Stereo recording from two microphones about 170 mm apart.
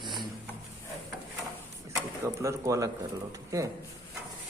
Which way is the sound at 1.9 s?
15° right (ahead or behind).